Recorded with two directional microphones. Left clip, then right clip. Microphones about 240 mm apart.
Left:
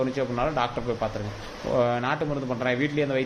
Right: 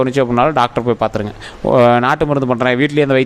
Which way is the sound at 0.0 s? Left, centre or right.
Right.